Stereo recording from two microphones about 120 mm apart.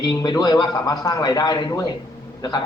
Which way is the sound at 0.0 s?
35° left (ahead or behind).